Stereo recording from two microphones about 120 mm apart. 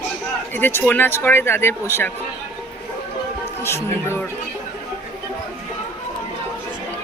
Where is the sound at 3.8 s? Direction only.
20° left (ahead or behind).